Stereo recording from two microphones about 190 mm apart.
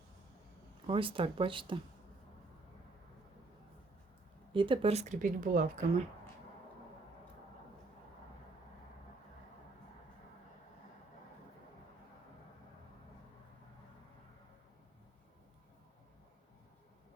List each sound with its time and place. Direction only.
0.9 s speech: 25° right (ahead or behind)
4.5 s speech: 25° right (ahead or behind); by 5.8 s 45° right (ahead or behind)